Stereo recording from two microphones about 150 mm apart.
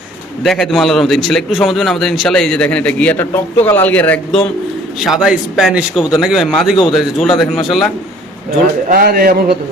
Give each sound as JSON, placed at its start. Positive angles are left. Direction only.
{"t": 0.4, "sound": "a man's voice", "side_deg": 0}
{"t": 4.9, "sound": "a man's voice", "side_deg": 0}
{"t": 8.9, "sound": "speech", "side_deg": -80}